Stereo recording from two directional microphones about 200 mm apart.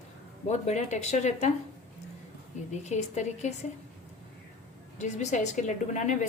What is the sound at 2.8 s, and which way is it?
Speech, 35° left (ahead or behind).